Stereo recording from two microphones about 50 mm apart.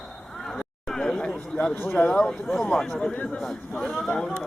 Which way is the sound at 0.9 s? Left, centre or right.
Centre.